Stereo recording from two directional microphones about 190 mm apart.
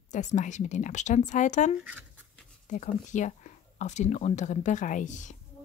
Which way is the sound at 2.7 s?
40° left (ahead or behind).